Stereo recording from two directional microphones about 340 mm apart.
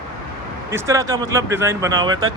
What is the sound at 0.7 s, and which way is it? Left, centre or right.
Speech, centre.